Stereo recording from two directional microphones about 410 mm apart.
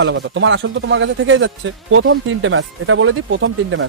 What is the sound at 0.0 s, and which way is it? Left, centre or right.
A man's voice, right.